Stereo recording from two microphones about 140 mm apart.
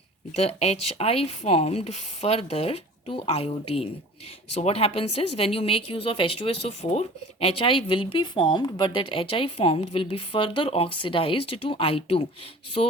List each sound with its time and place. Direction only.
0.3 s a woman's voice: 45° left (ahead or behind)